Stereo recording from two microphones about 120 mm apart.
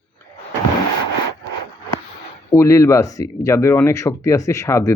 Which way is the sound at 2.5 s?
25° left (ahead or behind).